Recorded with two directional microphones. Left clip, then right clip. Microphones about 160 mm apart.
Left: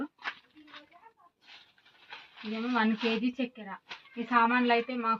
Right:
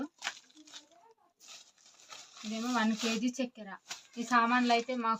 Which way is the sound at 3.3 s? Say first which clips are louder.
Left 2 dB; 25° right (ahead or behind).